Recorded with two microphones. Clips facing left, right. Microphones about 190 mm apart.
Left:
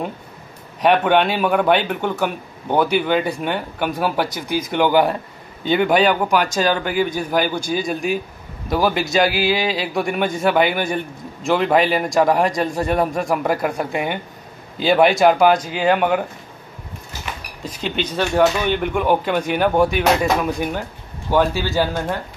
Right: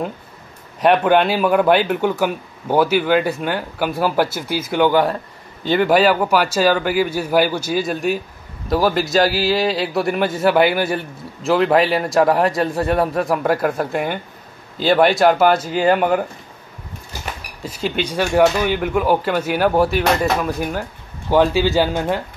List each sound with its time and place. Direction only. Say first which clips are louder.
0.7 s a man's voice: right 1 dB; centre (ahead or behind)
17.6 s a man's voice: right 2 dB; 5° right (ahead or behind)
21.3 s speech: right 3 dB; 15° right (ahead or behind)